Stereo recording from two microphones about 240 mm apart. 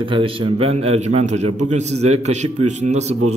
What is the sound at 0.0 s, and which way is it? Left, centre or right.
Speech, right.